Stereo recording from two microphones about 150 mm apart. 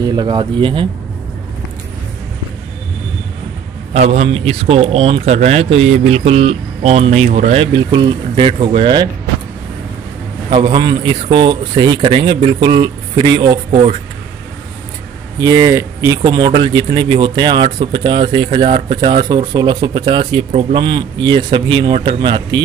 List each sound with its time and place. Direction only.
0.0 s speech: 25° right (ahead or behind)
3.9 s speech: 50° right (ahead or behind)
7.6 s speech: 30° right (ahead or behind)
10.5 s speech: 30° right (ahead or behind)
15.3 s speech: 25° right (ahead or behind)